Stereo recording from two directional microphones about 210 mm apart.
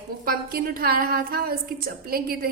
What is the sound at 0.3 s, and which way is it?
A woman's voice, 45° right (ahead or behind).